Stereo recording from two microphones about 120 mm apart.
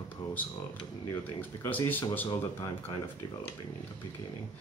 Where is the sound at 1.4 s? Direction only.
15° left (ahead or behind).